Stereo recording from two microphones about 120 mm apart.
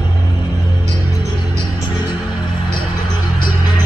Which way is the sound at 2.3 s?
45° left (ahead or behind).